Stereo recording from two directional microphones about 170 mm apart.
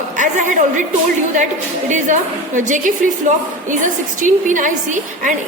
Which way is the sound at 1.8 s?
45° right (ahead or behind).